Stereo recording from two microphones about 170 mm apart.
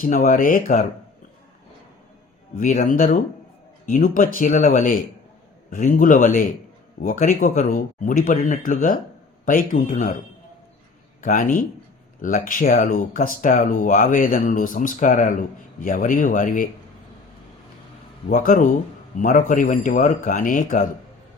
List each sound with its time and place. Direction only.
0.0 s speech: 50° left (ahead or behind)
2.6 s speech: 50° left (ahead or behind)
11.2 s speech: 50° left (ahead or behind)
18.3 s speech: 50° left (ahead or behind)